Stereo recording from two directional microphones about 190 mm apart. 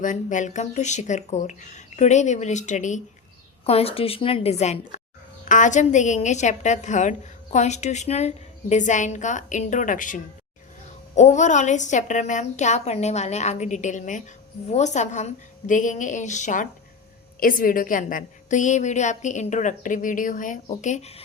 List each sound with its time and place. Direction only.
0.0 s a woman's voice: 40° left (ahead or behind)